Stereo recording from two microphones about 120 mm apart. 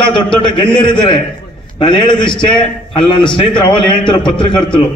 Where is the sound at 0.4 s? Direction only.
45° left (ahead or behind).